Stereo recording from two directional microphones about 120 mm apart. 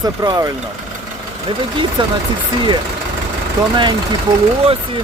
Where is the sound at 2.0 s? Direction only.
45° right (ahead or behind).